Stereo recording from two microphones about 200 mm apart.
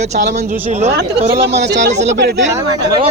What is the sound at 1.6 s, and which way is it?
Speech, 60° right (ahead or behind).